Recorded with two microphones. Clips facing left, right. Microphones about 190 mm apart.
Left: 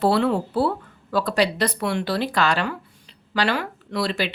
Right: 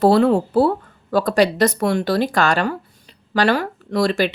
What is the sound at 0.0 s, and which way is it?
Speech, 40° right (ahead or behind).